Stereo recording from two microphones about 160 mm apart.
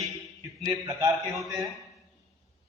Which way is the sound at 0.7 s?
20° right (ahead or behind).